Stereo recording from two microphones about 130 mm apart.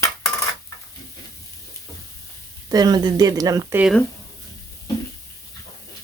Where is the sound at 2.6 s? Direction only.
30° right (ahead or behind).